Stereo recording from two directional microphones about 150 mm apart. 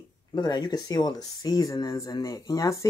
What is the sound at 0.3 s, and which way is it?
Speech, 30° left (ahead or behind).